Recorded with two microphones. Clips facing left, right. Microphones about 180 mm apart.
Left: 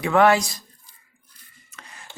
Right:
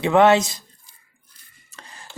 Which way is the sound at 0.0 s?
25° right (ahead or behind).